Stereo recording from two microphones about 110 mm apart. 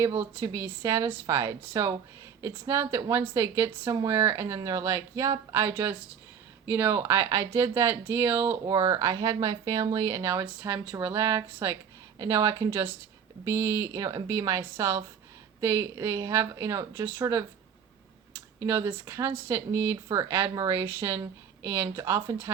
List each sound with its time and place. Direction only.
0.2 s speech: 25° right (ahead or behind)
10.4 s speech: 15° right (ahead or behind)